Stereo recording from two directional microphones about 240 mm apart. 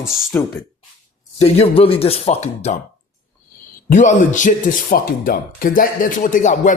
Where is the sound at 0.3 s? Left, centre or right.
Centre.